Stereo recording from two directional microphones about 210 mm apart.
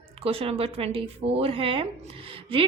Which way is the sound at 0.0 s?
25° right (ahead or behind).